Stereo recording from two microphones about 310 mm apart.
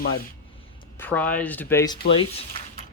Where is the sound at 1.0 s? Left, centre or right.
Centre.